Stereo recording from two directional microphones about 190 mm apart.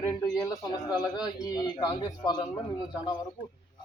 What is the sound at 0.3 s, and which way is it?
A man's voice, 20° left (ahead or behind).